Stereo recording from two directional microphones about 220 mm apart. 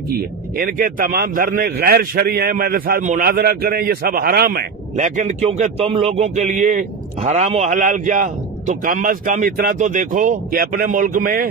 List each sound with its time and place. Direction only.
0.1 s a man's voice: 40° right (ahead or behind)